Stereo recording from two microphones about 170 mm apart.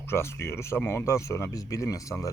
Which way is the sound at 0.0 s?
15° left (ahead or behind).